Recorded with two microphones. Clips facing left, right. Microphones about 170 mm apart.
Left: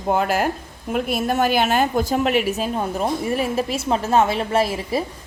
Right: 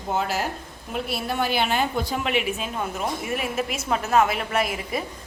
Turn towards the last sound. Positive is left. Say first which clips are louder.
# left 5 dB
turn(degrees=30)  # may be behind; listen again after turning